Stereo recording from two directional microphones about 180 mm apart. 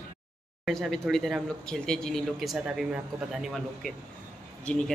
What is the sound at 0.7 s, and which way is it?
Speech, centre (ahead or behind).